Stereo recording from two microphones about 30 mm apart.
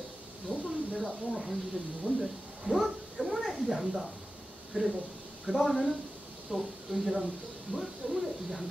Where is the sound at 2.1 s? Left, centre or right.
Right.